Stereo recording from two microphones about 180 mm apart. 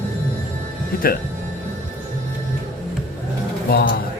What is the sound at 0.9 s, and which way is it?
Speech, 55° left (ahead or behind).